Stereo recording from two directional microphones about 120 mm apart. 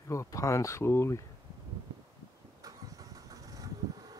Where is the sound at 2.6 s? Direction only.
30° right (ahead or behind).